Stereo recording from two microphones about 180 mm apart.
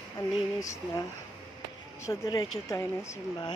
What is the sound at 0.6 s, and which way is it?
Speech, 20° left (ahead or behind).